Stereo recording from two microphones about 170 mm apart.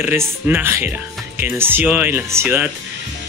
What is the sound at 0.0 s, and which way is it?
Speech, 15° right (ahead or behind).